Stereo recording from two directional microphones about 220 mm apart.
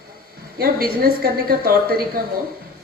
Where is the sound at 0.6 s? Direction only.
45° right (ahead or behind).